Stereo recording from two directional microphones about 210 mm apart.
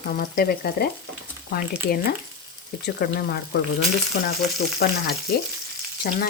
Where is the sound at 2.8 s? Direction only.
50° left (ahead or behind).